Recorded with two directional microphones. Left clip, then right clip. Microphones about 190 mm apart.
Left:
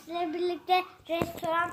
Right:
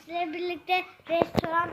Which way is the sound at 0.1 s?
10° right (ahead or behind).